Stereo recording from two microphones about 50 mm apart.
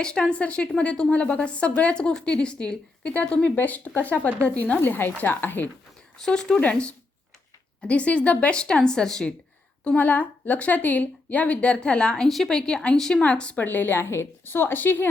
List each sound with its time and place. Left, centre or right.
0.0 s a woman's voice: centre; by 5.6 s left
6.1 s speech: centre
6.6 s a woman's voice: left
10.0 s a woman's voice: left; by 13.2 s centre
13.2 s a woman's voice: left
13.6 s a woman's voice: left